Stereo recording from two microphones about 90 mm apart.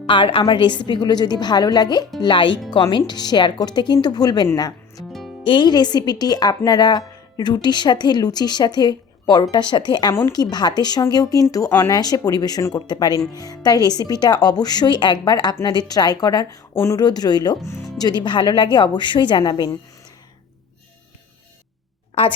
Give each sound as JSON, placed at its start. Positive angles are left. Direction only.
{"t": 0.1, "sound": "a woman's voice", "side_deg": 70}
{"t": 2.2, "sound": "speech", "side_deg": 60}
{"t": 4.5, "sound": "music", "side_deg": 45}
{"t": 5.4, "sound": "speech", "side_deg": 65}